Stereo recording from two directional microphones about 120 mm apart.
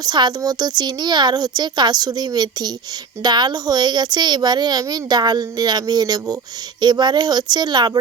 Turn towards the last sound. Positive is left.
turn(degrees=-35)  # may be behind; listen again after turning